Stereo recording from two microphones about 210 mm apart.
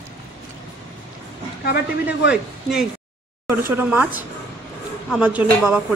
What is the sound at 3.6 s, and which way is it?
Speech, 10° right (ahead or behind).